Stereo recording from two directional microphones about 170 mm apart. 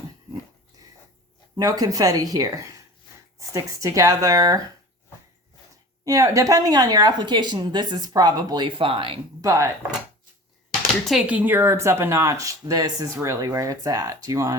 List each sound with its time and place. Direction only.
1.5 s a woman's voice: 20° right (ahead or behind)
6.1 s a woman's voice: 20° right (ahead or behind)
9.4 s a woman's voice: 20° right (ahead or behind)
11.0 s a woman's voice: centre (ahead or behind); by 14.5 s 20° right (ahead or behind)